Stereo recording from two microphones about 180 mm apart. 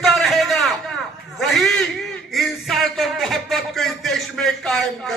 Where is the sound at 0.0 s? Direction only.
Centre (ahead or behind).